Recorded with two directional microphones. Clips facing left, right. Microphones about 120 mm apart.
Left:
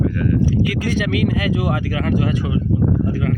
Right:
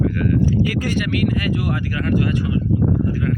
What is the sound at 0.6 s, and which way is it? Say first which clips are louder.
Speech: left 1 dB; 90° left.